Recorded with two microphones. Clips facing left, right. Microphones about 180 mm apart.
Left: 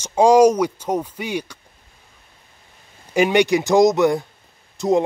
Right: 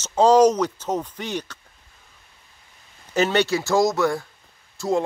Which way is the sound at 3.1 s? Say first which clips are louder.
Left 4 dB; 15° left (ahead or behind).